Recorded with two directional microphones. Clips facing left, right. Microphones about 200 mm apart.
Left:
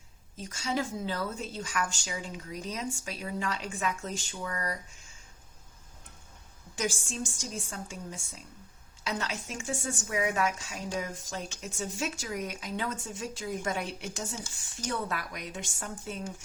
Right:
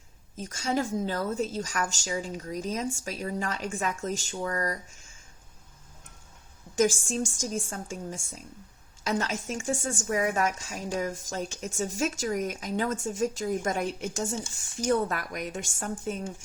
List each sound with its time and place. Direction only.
0.3 s a woman's voice: 45° right (ahead or behind)
6.7 s a woman's voice: 45° right (ahead or behind)